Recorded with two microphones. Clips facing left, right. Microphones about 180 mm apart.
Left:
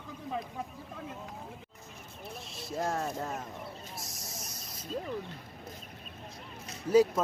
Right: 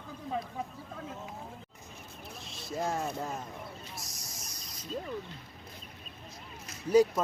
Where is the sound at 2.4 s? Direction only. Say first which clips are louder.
Even; centre (ahead or behind).